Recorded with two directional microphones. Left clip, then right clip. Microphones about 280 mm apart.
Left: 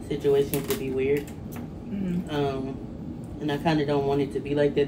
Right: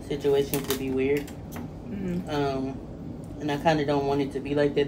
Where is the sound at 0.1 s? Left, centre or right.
Centre.